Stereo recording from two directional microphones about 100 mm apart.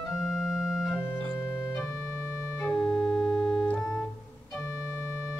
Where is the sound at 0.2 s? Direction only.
5° right (ahead or behind).